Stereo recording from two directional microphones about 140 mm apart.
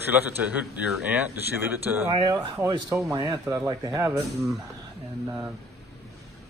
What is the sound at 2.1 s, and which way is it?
A man's voice, 30° right (ahead or behind).